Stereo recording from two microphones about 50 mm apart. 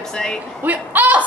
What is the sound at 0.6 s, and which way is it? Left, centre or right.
Speech, right.